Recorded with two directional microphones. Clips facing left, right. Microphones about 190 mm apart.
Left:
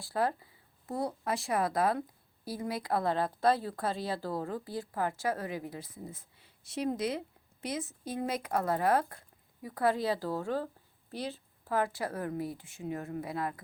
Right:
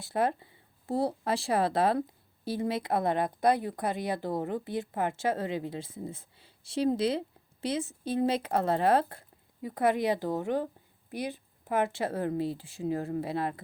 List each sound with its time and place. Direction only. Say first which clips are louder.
0.0 s speech: right 3 dB; 20° right (ahead or behind)